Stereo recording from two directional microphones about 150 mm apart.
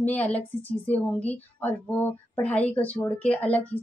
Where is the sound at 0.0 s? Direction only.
10° left (ahead or behind).